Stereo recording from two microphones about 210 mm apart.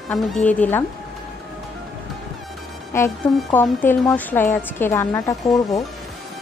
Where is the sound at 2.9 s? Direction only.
10° left (ahead or behind).